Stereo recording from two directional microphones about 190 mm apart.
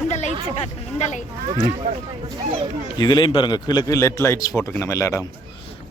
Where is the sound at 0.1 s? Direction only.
35° left (ahead or behind).